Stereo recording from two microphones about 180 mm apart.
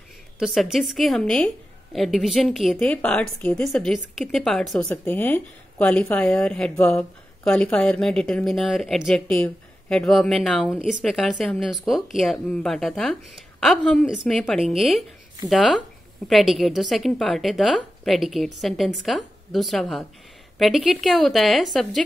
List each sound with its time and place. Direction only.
0.4 s speech: 5° right (ahead or behind)